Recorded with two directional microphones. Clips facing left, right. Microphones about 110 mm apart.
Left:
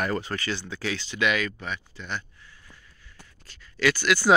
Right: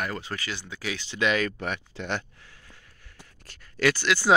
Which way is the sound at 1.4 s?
60° right (ahead or behind).